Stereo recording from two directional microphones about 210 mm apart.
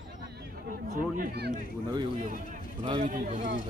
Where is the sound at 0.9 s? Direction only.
45° right (ahead or behind).